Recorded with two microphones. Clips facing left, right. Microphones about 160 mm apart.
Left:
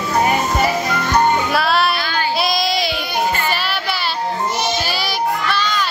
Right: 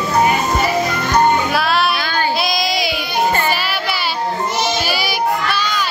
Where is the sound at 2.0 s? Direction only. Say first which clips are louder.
Right 2 dB; 45° right (ahead or behind).